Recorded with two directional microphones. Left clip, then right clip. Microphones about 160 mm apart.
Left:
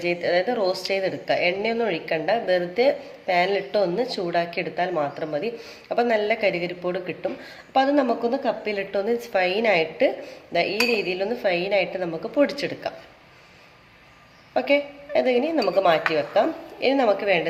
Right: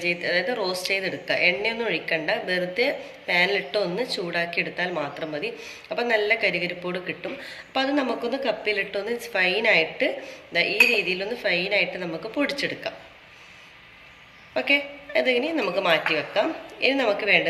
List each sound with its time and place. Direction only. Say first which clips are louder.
0.0 s speech: left 2 dB; 55° left (ahead or behind)
14.5 s speech: left 1 dB; 50° left (ahead or behind)